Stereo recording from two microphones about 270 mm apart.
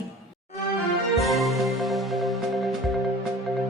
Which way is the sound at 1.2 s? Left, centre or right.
Centre.